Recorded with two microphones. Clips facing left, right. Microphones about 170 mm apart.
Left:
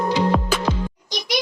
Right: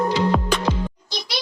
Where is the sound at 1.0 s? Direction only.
15° left (ahead or behind).